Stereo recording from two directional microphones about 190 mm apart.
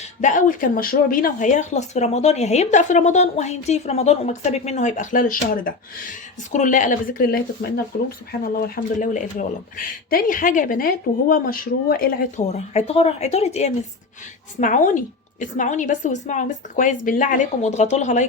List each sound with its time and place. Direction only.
0.2 s speech: 40° left (ahead or behind)
12.4 s speech: 35° left (ahead or behind)